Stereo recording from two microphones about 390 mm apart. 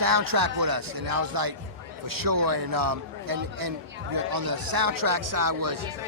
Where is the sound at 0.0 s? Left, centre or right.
Right.